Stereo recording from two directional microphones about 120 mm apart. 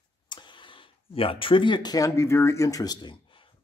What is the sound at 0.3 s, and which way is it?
Speech, 40° left (ahead or behind).